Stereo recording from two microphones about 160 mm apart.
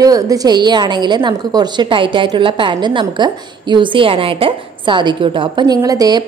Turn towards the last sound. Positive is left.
turn(degrees=-25)  # may be behind; listen again after turning